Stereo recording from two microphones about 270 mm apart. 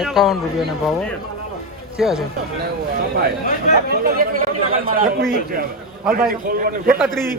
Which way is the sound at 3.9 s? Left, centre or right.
Right.